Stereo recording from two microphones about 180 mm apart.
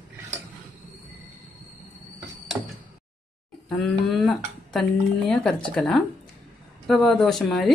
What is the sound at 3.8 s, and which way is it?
Speech, centre (ahead or behind).